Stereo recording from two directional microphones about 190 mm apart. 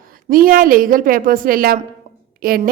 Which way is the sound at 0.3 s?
50° right (ahead or behind).